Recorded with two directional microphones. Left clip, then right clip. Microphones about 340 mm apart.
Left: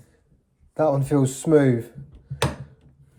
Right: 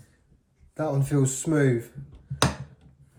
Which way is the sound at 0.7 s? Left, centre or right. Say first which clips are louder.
Left 7 dB; centre.